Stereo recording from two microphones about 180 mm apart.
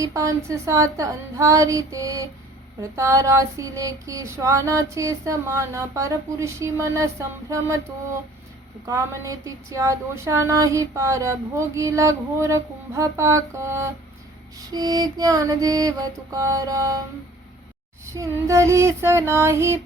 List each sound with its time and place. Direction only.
0.0 s female singing: 15° right (ahead or behind)
14.7 s music: 20° right (ahead or behind)
18.1 s female singing: 15° right (ahead or behind)